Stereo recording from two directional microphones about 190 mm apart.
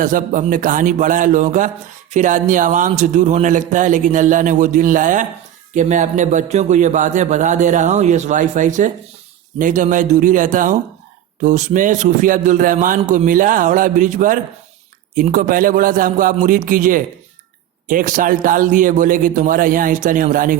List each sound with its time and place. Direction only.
0.0 s a man's voice: 45° right (ahead or behind)